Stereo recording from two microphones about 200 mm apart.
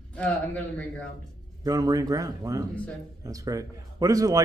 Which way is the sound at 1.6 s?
20° right (ahead or behind).